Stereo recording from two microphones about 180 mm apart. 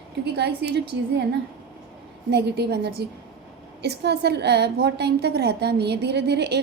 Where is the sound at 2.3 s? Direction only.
65° right (ahead or behind).